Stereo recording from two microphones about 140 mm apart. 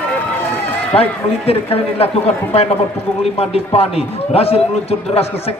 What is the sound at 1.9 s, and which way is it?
A man's voice, 45° left (ahead or behind).